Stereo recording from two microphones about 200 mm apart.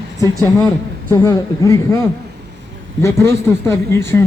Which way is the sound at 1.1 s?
15° left (ahead or behind).